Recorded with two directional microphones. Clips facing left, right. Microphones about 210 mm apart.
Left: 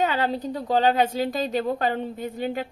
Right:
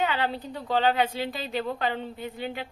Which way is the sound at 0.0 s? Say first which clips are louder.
Left 4 dB; 40° left (ahead or behind).